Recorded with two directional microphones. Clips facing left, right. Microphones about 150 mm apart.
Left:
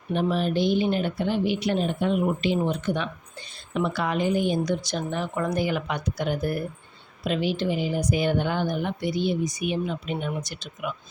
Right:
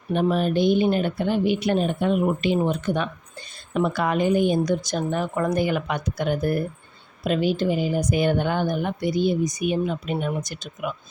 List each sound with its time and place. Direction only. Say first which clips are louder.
0.1 s a woman's voice: right 3 dB; 50° right (ahead or behind)